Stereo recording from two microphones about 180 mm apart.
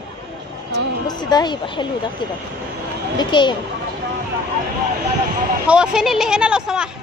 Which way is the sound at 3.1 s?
25° left (ahead or behind).